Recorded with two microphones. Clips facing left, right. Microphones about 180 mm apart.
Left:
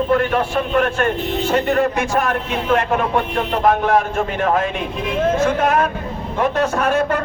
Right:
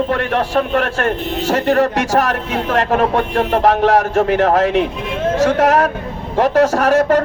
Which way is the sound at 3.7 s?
80° right.